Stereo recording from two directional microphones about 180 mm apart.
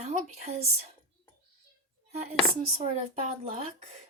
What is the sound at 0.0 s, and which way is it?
Speech, 40° right (ahead or behind).